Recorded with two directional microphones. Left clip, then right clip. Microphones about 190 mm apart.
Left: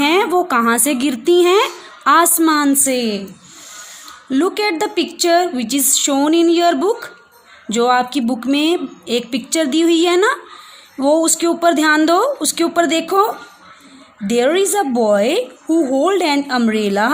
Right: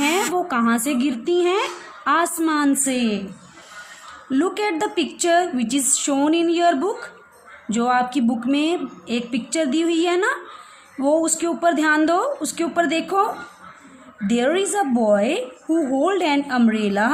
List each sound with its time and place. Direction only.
0.0 s a woman's voice: 45° left (ahead or behind)
4.3 s a woman's voice: 35° left (ahead or behind)